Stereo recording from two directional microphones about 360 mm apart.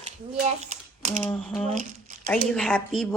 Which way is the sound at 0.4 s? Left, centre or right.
Centre.